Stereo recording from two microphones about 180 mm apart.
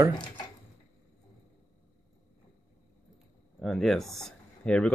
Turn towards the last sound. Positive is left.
turn(degrees=5)  # may be behind; listen again after turning